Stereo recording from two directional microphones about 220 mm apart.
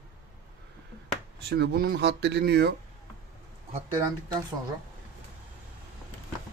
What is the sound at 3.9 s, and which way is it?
Speech, 15° right (ahead or behind).